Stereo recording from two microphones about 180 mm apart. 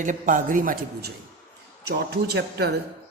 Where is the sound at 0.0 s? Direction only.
45° right (ahead or behind).